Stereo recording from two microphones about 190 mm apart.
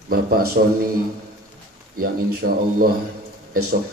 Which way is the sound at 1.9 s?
50° right (ahead or behind).